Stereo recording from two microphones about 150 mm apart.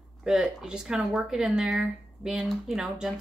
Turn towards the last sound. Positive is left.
turn(degrees=-5)  # may be behind; listen again after turning